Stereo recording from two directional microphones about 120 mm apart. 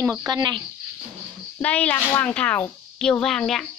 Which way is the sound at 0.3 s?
35° right (ahead or behind).